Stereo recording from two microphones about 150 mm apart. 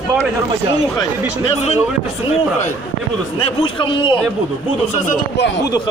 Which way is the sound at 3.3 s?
40° left (ahead or behind).